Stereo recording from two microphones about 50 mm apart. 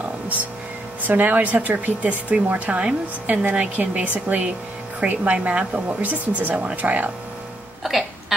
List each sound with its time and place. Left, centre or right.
1.0 s speech: right
7.8 s music: centre